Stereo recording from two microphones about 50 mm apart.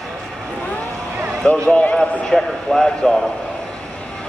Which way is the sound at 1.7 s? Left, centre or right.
Left.